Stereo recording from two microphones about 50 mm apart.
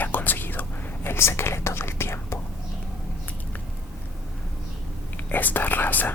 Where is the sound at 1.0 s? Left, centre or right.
Left.